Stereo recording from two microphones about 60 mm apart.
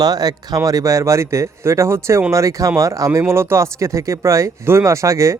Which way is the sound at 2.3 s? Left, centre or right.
Right.